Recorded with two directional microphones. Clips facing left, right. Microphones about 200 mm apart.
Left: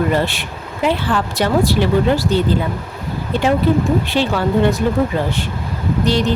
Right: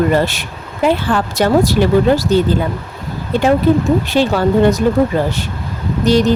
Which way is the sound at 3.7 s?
45° right (ahead or behind).